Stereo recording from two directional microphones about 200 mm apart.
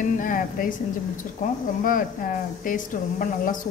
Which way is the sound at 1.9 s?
45° left (ahead or behind).